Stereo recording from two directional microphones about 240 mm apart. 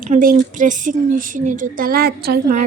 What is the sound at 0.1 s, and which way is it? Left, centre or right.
A woman's voice, right.